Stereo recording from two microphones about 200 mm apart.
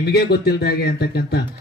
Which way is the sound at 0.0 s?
55° left (ahead or behind).